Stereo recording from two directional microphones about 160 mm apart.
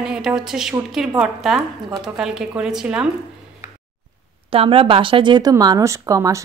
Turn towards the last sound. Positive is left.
turn(degrees=-20)  # may be behind; listen again after turning